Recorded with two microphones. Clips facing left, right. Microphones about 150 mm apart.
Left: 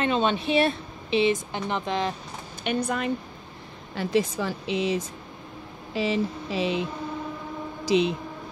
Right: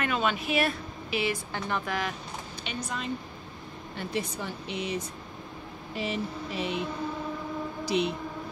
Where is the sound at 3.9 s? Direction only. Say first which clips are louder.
Left 8 dB; 90° left.